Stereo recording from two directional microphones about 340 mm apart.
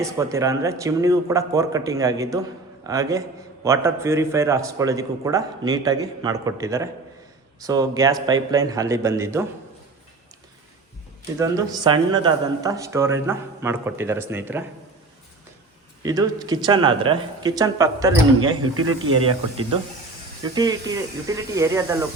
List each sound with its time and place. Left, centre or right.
0.0 s a man's voice: centre
11.3 s a man's voice: centre
16.0 s a man's voice: centre